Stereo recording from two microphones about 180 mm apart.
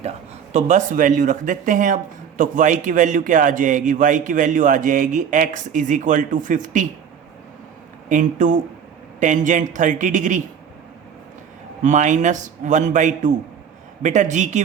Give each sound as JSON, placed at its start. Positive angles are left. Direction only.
{"t": 0.5, "sound": "a man's voice", "side_deg": -40}
{"t": 8.1, "sound": "a man's voice", "side_deg": -45}
{"t": 11.8, "sound": "a man's voice", "side_deg": -40}